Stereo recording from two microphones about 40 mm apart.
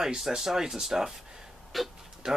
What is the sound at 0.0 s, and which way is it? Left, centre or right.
Speech, centre.